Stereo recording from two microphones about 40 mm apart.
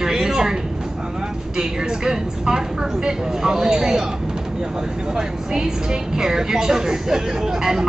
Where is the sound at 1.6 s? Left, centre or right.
Centre.